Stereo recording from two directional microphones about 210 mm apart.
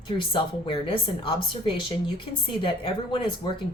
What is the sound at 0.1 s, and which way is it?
Speech, 20° left (ahead or behind).